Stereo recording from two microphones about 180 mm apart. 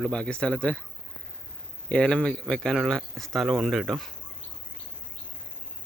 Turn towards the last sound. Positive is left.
turn(degrees=0)  # may be behind; listen again after turning